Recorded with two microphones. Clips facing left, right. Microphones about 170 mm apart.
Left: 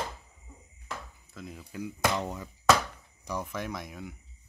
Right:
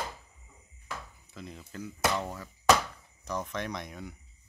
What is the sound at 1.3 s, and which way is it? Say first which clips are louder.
Speech: left 2 dB; centre (ahead or behind).